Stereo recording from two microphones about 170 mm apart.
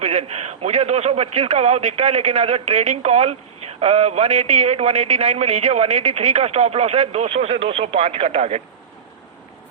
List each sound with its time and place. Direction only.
0.0 s a man's voice: 40° right (ahead or behind)